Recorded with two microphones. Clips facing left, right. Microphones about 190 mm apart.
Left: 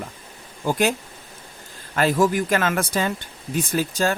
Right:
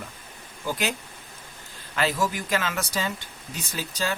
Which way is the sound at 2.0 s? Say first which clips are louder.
Left 7 dB; 50° left (ahead or behind).